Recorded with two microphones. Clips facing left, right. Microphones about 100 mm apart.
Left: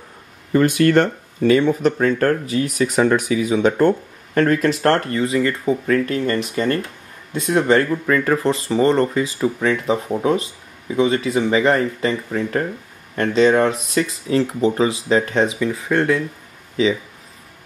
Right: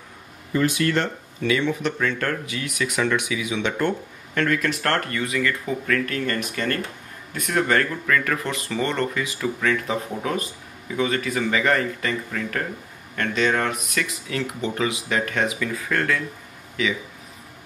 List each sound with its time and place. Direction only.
0.5 s speech: 50° left (ahead or behind); by 16.9 s 30° left (ahead or behind)